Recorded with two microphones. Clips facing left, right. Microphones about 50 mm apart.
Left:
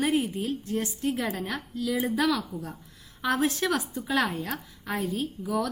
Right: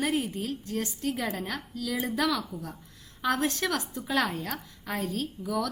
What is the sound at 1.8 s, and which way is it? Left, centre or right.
A woman's voice, centre.